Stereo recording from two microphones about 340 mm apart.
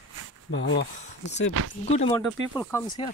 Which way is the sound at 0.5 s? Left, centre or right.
Left.